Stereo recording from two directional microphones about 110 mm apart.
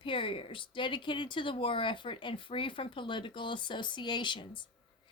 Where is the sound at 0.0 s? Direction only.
50° left (ahead or behind).